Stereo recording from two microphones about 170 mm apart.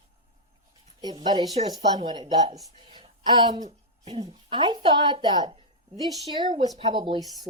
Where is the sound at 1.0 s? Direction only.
25° right (ahead or behind).